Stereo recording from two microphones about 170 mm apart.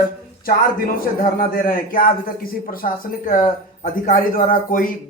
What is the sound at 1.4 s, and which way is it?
A man's voice, 55° left (ahead or behind).